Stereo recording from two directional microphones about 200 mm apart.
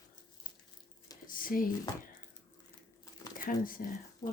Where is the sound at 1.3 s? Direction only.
45° left (ahead or behind).